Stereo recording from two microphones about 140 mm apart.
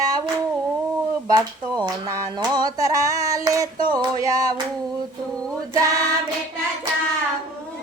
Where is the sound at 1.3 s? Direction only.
25° right (ahead or behind).